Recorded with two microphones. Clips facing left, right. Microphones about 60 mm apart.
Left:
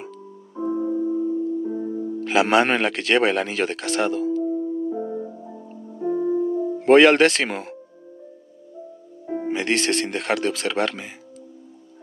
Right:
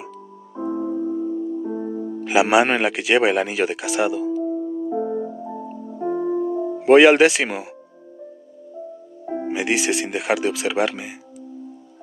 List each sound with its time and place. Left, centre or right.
0.6 s music: centre
2.1 s music: centre; by 6.8 s right
6.8 s speech: centre
9.3 s speech: centre